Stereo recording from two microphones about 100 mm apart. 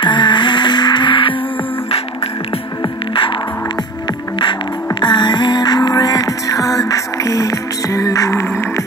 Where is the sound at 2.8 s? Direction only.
60° left (ahead or behind).